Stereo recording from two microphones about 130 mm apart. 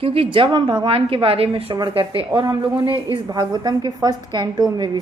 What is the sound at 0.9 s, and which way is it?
A woman's voice, 45° right (ahead or behind).